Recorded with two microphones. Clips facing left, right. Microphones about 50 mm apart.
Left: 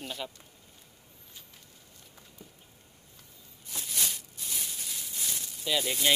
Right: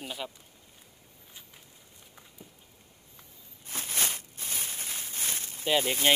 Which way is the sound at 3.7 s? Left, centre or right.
Right.